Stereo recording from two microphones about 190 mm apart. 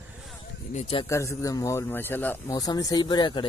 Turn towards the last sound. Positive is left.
turn(degrees=25)  # may be behind; listen again after turning